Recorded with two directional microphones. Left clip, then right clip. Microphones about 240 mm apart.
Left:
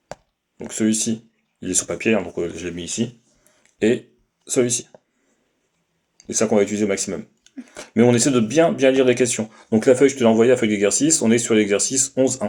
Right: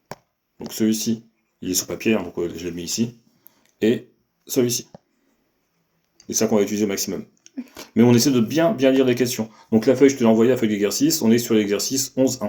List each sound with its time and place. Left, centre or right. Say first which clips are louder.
0.7 s speech: left 1 dB; left
3.6 s a sound: left 1 dB; left
4.4 s speech: left 1 dB; left
6.1 s speech: left 2 dB; left